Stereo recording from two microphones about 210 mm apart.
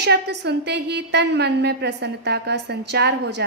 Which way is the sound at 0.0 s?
55° right (ahead or behind).